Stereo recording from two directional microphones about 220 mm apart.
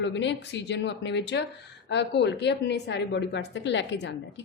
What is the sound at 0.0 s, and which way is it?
A woman's voice, 55° left (ahead or behind).